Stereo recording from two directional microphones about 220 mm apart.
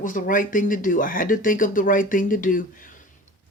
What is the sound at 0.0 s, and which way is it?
Speech, 35° left (ahead or behind).